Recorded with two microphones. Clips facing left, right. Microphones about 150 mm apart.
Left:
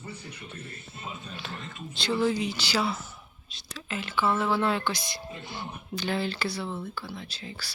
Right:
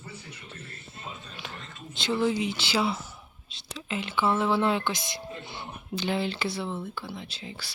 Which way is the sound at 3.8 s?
20° right (ahead or behind).